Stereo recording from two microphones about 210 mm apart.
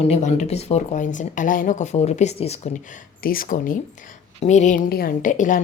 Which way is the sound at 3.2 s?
45° left (ahead or behind).